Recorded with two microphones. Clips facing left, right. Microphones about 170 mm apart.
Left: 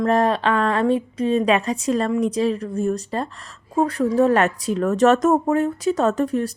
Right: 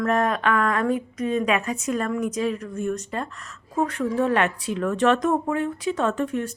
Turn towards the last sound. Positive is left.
turn(degrees=35)  # may be behind; listen again after turning